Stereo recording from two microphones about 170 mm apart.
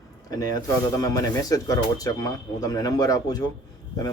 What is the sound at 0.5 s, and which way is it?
Speech, 20° left (ahead or behind).